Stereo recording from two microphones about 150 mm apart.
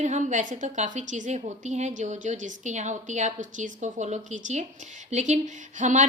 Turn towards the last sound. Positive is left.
turn(degrees=-55)  # may be behind; listen again after turning